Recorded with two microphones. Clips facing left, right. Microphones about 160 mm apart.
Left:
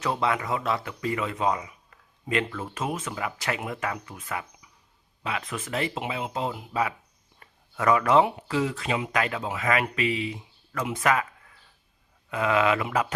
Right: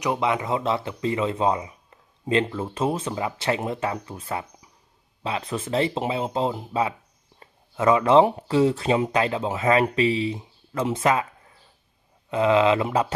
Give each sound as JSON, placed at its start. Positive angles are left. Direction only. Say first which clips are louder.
{"t": 0.0, "sound": "speech", "louder": "right 3 dB", "side_deg": -20}
{"t": 7.3, "sound": "a sound", "louder": "right 5 dB", "side_deg": -25}
{"t": 8.4, "sound": "speech", "louder": "right 7 dB", "side_deg": -30}